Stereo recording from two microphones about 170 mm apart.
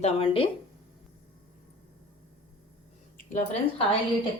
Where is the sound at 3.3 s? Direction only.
40° left (ahead or behind).